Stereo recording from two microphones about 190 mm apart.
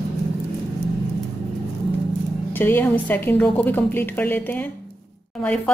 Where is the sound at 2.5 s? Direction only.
10° left (ahead or behind).